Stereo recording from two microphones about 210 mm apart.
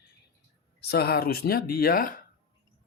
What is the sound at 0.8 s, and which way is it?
Speech, 50° left (ahead or behind).